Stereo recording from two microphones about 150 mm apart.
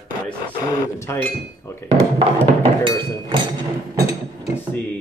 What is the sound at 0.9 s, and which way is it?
Speech, 20° left (ahead or behind).